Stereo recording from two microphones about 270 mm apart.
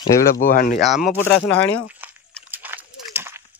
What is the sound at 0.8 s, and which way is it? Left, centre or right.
Speech, centre.